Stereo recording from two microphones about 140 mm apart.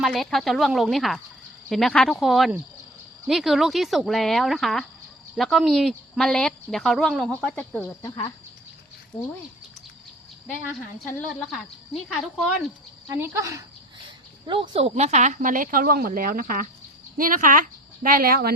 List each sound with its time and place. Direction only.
0.0 s speech: centre (ahead or behind)
8.0 s speech: 25° left (ahead or behind)
11.0 s speech: centre (ahead or behind)
13.1 s speech: 20° right (ahead or behind)
14.4 s speech: 35° right (ahead or behind)
14.8 s speech: 50° right (ahead or behind); by 16.6 s 85° right
17.2 s speech: 75° right (ahead or behind); by 18.5 s 90° right